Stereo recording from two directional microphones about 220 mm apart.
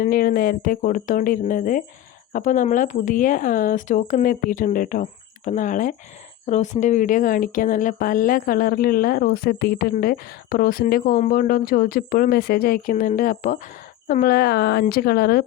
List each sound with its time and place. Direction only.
0.0 s a woman's voice: 40° left (ahead or behind)